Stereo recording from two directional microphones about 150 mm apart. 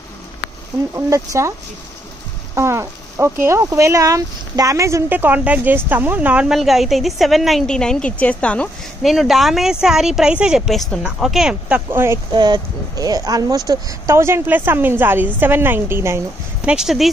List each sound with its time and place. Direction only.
0.9 s speech: 20° right (ahead or behind)
2.5 s a sound: 20° right (ahead or behind)
3.4 s speech: 20° right (ahead or behind); by 11.8 s 5° right (ahead or behind)
11.9 s a woman's voice: 15° right (ahead or behind)
12.3 s a woman's voice: 30° right (ahead or behind)
16.6 s speech: 5° right (ahead or behind)